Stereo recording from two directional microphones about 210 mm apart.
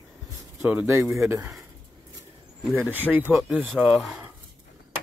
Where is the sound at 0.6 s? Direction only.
10° right (ahead or behind).